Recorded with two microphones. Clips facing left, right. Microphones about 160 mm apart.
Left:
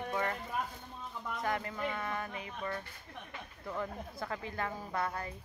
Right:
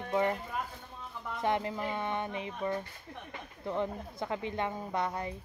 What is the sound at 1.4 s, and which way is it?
Speech, 25° right (ahead or behind).